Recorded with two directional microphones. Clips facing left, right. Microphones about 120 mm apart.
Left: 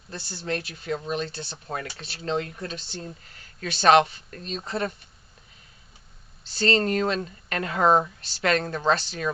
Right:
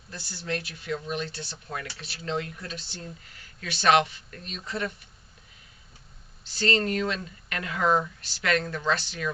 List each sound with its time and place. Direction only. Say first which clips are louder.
0.1 s speech: left 3 dB; 30° left (ahead or behind)
6.5 s speech: left 3 dB; 35° left (ahead or behind)